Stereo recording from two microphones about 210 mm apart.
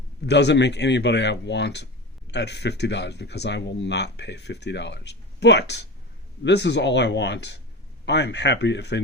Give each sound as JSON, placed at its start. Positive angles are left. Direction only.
{"t": 0.3, "sound": "speech", "side_deg": 55}